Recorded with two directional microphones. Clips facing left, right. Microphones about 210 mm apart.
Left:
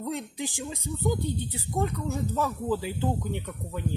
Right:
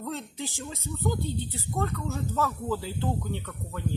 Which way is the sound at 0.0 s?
15° left (ahead or behind).